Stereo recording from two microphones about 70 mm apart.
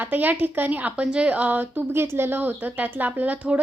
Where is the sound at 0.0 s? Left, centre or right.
Right.